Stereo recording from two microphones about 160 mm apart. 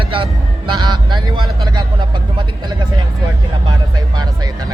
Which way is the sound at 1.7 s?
30° right (ahead or behind).